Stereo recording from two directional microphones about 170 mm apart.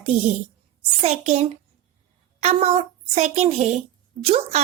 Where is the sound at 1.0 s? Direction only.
40° right (ahead or behind).